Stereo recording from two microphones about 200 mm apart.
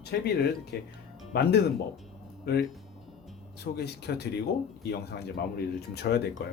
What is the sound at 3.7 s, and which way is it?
Speech, 55° left (ahead or behind).